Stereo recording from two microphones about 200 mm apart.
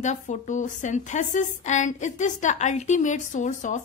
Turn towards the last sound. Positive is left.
turn(degrees=40)  # may be behind; listen again after turning